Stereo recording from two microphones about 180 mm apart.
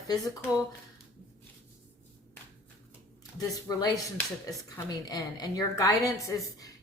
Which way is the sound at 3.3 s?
20° left (ahead or behind).